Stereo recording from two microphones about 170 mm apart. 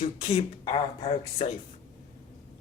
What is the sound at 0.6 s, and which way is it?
Speech, 30° left (ahead or behind).